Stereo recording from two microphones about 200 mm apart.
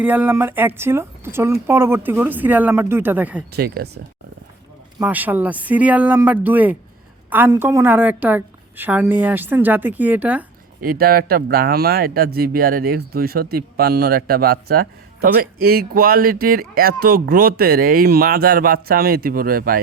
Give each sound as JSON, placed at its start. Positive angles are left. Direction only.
{"t": 0.0, "sound": "speech", "side_deg": -10}
{"t": 3.5, "sound": "speech", "side_deg": -50}
{"t": 4.9, "sound": "speech", "side_deg": -10}
{"t": 10.8, "sound": "speech", "side_deg": -50}